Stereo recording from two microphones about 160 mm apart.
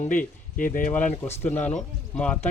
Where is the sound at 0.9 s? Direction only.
10° left (ahead or behind).